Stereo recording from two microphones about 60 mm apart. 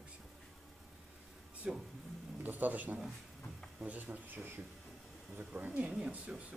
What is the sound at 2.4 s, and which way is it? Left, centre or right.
Speech, right.